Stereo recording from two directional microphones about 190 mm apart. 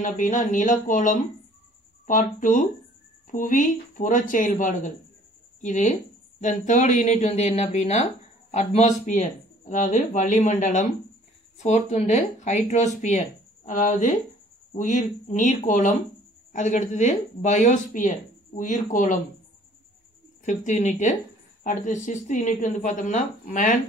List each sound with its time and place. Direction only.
0.0 s speech: 40° left (ahead or behind)
20.4 s speech: 40° left (ahead or behind)